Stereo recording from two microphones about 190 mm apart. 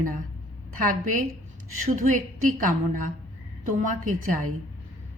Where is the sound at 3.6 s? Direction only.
45° right (ahead or behind).